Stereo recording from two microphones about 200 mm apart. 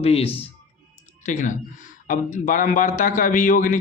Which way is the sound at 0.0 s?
30° left (ahead or behind).